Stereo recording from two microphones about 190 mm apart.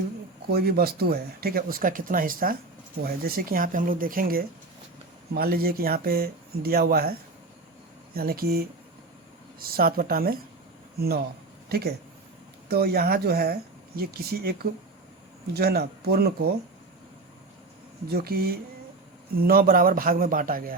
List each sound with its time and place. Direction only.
0.5 s speech: 55° right (ahead or behind)
11.7 s speech: 55° right (ahead or behind)
18.1 s speech: 50° right (ahead or behind)